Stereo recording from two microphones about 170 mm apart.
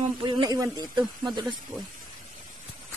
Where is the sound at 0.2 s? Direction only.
30° right (ahead or behind).